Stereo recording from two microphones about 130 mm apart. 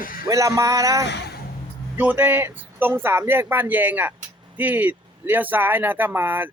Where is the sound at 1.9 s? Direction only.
15° right (ahead or behind).